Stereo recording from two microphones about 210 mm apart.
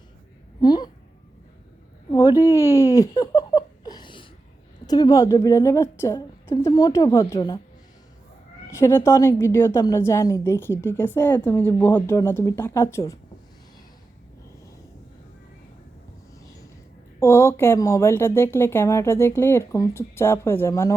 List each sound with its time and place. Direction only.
0.6 s speech: 20° left (ahead or behind)
2.0 s speech: 15° left (ahead or behind)
2.4 s giggle: 15° left (ahead or behind)
4.9 s a woman's voice: 20° left (ahead or behind)
8.7 s a woman's voice: 10° left (ahead or behind)
17.2 s a woman's voice: 10° left (ahead or behind)